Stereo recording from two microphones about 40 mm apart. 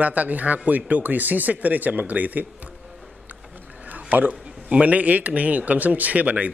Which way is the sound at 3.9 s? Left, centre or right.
Right.